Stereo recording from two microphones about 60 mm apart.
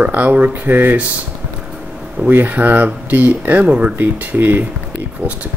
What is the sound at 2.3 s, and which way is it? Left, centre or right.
Speech, right.